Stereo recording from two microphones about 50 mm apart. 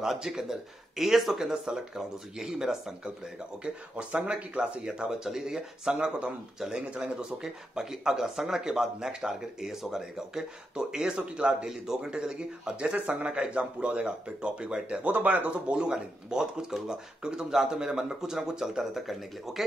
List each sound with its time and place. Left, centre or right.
0.0 s speech: centre
3.9 s speech: right
12.8 s speech: right
15.0 s speech: right
15.7 s speech: centre